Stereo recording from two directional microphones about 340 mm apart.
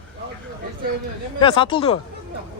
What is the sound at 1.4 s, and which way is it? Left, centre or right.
Speech, centre.